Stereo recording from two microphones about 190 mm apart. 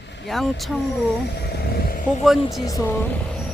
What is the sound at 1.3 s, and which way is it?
Speech, 60° left (ahead or behind).